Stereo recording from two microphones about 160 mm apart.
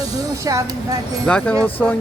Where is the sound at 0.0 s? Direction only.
20° right (ahead or behind).